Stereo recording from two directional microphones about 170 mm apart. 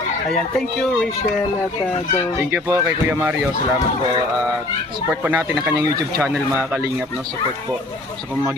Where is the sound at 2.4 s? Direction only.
15° right (ahead or behind).